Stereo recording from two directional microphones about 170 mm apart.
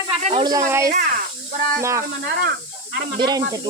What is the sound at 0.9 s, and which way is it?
Speech, 55° right (ahead or behind).